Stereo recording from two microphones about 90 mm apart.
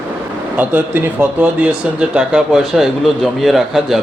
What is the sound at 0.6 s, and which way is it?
Speech, 20° right (ahead or behind).